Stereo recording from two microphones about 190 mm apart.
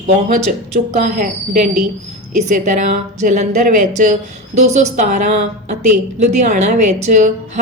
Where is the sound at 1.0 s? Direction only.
45° right (ahead or behind).